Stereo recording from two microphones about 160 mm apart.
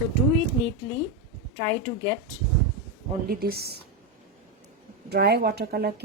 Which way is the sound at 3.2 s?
75° right (ahead or behind).